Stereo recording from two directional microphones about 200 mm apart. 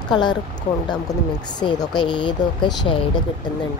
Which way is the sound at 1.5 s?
20° left (ahead or behind).